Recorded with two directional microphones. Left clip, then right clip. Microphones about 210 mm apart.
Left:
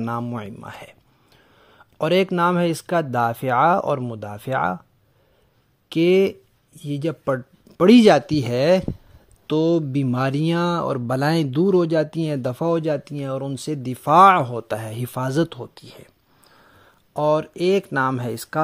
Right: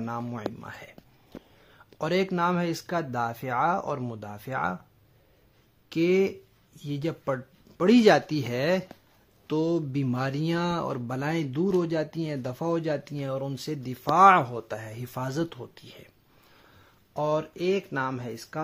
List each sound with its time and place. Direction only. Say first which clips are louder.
0.0 s speech: left 6 dB; 35° left (ahead or behind)
5.9 s speech: left 7 dB; 35° left (ahead or behind)